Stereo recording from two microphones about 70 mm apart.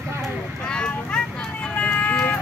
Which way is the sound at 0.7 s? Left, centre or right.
Centre.